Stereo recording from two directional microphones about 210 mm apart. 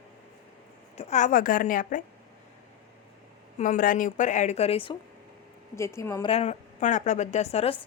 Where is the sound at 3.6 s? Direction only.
40° left (ahead or behind).